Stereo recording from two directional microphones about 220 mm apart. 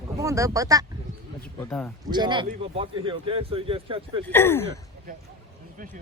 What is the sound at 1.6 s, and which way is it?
Speech, 10° left (ahead or behind).